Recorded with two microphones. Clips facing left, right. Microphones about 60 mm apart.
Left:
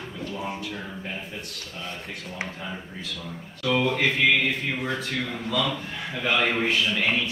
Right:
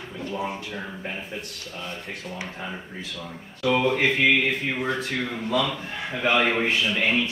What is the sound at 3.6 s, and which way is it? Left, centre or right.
Speech, centre.